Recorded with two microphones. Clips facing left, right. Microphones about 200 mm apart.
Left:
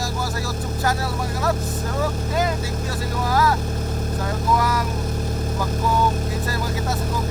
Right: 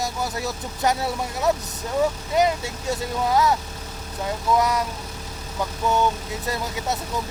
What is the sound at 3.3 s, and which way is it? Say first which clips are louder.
Speech: even; 20° right (ahead or behind).